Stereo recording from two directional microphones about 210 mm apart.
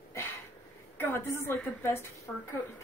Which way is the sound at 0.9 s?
10° left (ahead or behind).